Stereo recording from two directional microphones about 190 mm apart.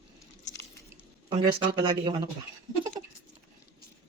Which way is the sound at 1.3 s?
25° right (ahead or behind).